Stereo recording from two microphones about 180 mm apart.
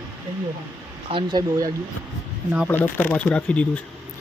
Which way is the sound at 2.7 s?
10° left (ahead or behind).